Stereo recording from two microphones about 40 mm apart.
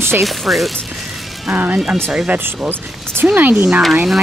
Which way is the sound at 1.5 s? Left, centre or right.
Right.